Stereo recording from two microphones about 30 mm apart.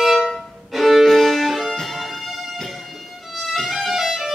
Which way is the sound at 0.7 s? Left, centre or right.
Centre.